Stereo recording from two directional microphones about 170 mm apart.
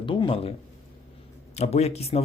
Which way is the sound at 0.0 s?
30° left (ahead or behind).